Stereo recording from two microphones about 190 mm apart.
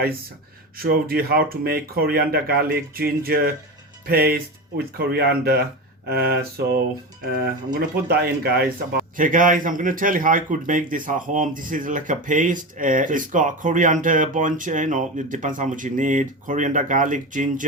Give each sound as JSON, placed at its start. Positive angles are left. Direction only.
{"t": 0.8, "sound": "speech", "side_deg": -50}